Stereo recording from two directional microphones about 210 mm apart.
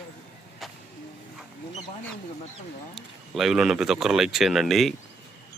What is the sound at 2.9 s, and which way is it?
Speech, centre (ahead or behind).